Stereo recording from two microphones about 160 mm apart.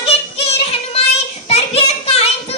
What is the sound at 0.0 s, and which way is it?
Music, 35° left (ahead or behind).